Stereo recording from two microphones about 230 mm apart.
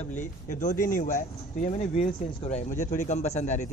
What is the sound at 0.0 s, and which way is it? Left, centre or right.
A man's voice, left.